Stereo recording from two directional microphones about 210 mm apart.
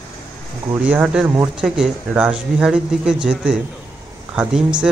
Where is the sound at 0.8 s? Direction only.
5° right (ahead or behind).